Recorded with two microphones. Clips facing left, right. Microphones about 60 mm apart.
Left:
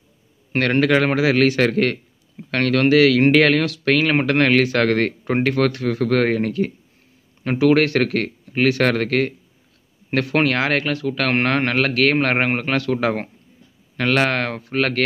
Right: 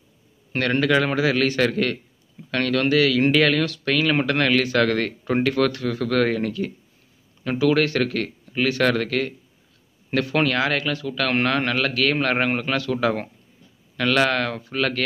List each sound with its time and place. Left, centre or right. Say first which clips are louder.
0.5 s a man's voice: left 3 dB; left